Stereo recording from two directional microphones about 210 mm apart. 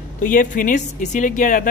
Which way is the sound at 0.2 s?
40° left (ahead or behind).